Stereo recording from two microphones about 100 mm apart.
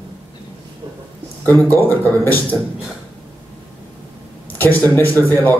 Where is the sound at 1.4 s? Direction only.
20° left (ahead or behind).